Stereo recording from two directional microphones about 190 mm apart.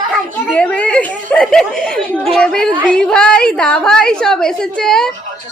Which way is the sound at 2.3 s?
5° left (ahead or behind).